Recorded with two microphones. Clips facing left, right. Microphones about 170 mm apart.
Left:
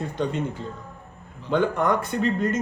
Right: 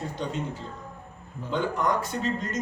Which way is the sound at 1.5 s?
60° left (ahead or behind).